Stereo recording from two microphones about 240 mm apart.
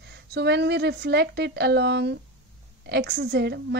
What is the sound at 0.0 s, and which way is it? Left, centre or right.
A woman's voice, right.